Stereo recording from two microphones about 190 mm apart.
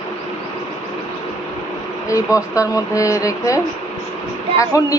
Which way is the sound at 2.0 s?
15° left (ahead or behind).